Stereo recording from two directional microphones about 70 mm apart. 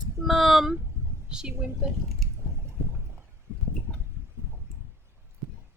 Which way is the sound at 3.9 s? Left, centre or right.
Centre.